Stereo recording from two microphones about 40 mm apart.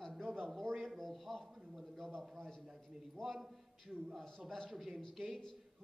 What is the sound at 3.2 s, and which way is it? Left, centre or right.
Speech, centre.